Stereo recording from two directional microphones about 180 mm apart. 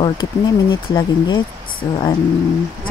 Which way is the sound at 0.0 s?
25° left (ahead or behind).